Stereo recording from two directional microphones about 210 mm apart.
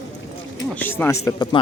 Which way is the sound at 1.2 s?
15° left (ahead or behind).